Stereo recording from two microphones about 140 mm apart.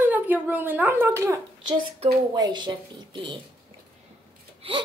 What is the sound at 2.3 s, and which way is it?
A woman's voice, 30° right (ahead or behind).